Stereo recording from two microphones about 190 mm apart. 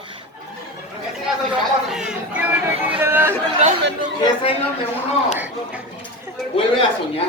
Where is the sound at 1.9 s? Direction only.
5° right (ahead or behind).